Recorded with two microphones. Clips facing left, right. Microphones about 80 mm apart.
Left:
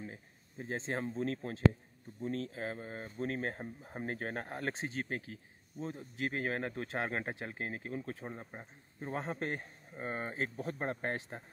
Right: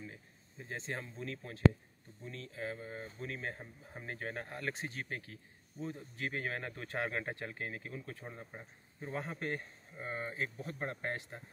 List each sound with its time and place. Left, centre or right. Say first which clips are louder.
0.0 s a sound: left 3 dB; left
1.1 s speech: left 8 dB; left
2.5 s speech: left 1 dB; left
5.9 s a man's voice: left 3 dB; centre; by 11.4 s left